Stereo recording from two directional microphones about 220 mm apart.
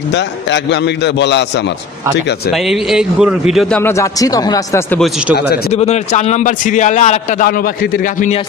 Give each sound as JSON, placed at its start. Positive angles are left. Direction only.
{"t": 0.1, "sound": "a man's voice", "side_deg": 50}
{"t": 2.5, "sound": "a man's voice", "side_deg": 0}
{"t": 3.8, "sound": "speech", "side_deg": 15}
{"t": 5.7, "sound": "a man's voice", "side_deg": 30}